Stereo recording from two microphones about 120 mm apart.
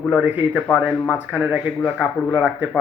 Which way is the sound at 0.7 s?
5° right (ahead or behind).